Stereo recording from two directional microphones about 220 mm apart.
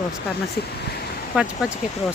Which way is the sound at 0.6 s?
45° left (ahead or behind).